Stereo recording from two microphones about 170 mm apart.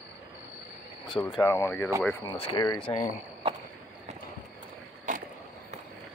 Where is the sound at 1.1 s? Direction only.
20° left (ahead or behind).